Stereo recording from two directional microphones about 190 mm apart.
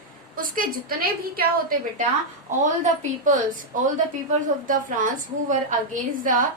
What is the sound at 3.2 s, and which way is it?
A woman's voice, 40° right (ahead or behind).